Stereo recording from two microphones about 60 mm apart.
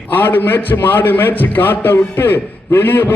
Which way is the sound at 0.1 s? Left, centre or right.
Left.